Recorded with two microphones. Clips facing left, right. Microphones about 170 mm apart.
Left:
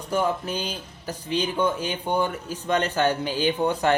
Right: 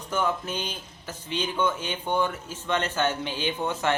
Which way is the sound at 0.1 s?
35° left (ahead or behind).